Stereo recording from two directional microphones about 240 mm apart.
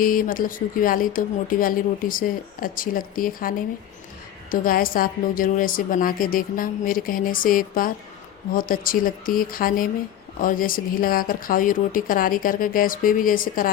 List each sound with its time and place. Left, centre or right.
0.0 s speech: left
4.5 s speech: left